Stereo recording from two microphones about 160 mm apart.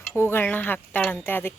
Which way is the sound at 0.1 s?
15° left (ahead or behind).